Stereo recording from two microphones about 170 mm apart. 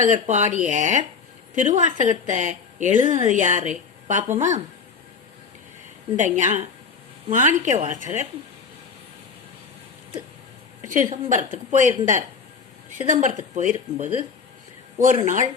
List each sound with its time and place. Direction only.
0.0 s a woman's voice: 45° right (ahead or behind)
6.1 s a woman's voice: 45° right (ahead or behind)
10.9 s a woman's voice: 45° right (ahead or behind)
14.9 s a woman's voice: 50° right (ahead or behind)